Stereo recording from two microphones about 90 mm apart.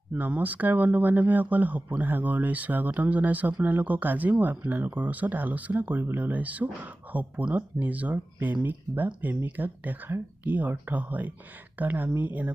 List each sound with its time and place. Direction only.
0.1 s speech: 15° right (ahead or behind)